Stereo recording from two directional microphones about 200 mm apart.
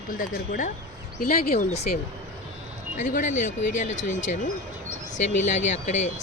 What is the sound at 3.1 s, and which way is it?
Speech, 40° left (ahead or behind).